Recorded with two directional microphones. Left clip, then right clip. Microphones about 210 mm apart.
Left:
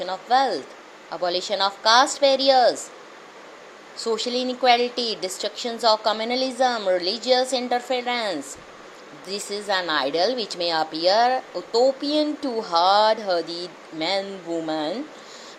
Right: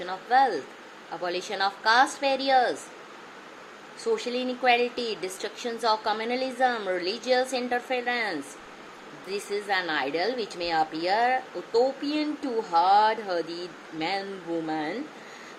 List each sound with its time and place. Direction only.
0.0 s a woman's voice: 15° left (ahead or behind)
4.0 s a woman's voice: 15° left (ahead or behind)